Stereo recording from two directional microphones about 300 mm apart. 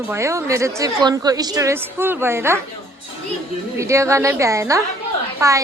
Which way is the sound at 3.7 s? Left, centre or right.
Centre.